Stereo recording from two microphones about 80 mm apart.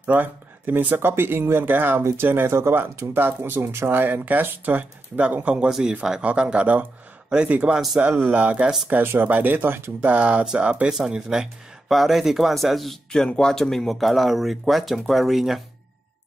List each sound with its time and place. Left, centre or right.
0.0 s speech: right
8.8 s speech: right
10.0 s speech: centre